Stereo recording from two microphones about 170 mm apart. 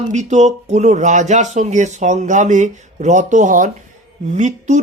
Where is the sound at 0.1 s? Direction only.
45° right (ahead or behind).